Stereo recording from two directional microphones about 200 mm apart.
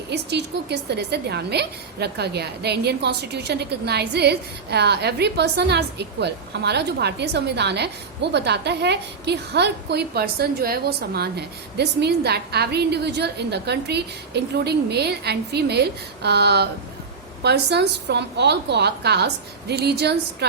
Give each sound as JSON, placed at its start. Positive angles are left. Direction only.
{"t": 0.1, "sound": "a woman's voice", "side_deg": -55}